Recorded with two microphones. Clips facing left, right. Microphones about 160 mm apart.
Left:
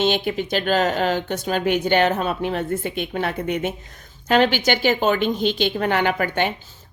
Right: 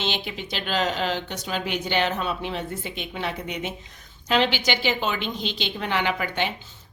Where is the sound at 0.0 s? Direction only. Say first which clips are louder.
Left 9 dB; 50° left (ahead or behind).